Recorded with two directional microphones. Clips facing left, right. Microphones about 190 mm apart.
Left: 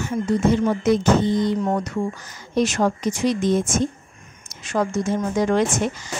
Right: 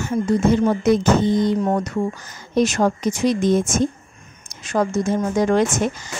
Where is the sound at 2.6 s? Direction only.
40° right (ahead or behind).